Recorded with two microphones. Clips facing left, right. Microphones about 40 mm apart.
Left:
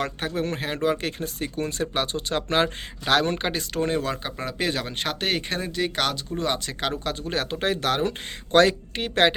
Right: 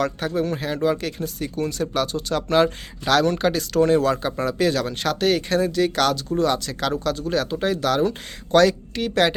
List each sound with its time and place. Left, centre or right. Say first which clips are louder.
0.0 s speech: right 4 dB; left; by 4.5 s centre
4.5 s speech: right 2 dB; left